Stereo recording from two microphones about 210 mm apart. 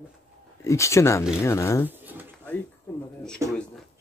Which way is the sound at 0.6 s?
15° left (ahead or behind).